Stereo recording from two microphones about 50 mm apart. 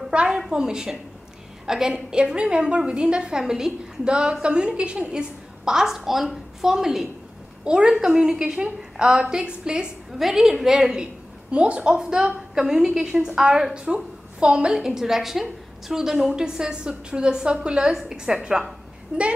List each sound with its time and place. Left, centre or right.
0.1 s a woman's voice: right
10.1 s a woman's voice: centre
11.5 s a woman's voice: right